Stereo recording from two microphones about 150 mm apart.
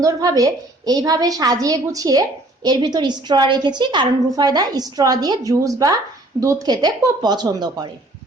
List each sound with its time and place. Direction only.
0.0 s a woman's voice: 25° right (ahead or behind)